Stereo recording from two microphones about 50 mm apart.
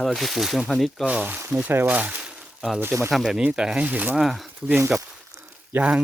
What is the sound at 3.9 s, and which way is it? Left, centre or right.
Speech, right.